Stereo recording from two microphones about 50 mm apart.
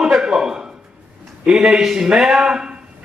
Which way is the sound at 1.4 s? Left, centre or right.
Centre.